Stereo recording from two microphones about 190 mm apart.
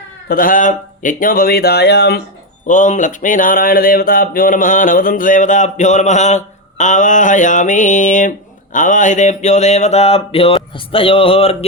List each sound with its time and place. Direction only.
0.3 s speech: 45° left (ahead or behind)
2.6 s speech: 40° left (ahead or behind)